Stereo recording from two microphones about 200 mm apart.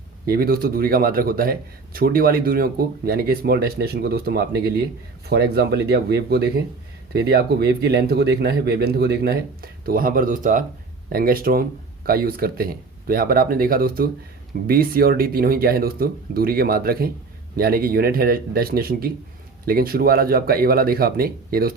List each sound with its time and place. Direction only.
0.3 s speech: 50° right (ahead or behind)